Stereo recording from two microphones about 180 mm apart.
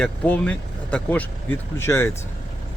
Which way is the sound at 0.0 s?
5° left (ahead or behind).